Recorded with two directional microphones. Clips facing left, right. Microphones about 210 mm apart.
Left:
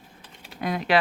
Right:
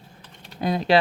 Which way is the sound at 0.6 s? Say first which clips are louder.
Right 4 dB; 30° right (ahead or behind).